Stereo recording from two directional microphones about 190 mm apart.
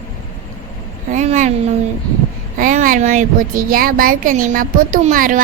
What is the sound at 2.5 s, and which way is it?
Speech, 45° right (ahead or behind).